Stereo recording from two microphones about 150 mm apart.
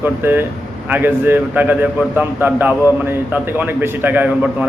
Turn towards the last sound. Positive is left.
turn(degrees=-10)  # may be behind; listen again after turning